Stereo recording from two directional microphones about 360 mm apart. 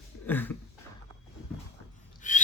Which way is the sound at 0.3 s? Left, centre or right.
Centre.